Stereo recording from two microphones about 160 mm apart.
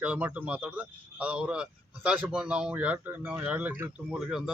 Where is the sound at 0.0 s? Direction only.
10° right (ahead or behind).